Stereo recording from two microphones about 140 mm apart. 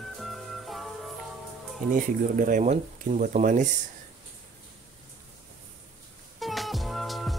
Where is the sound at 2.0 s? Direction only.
70° right (ahead or behind).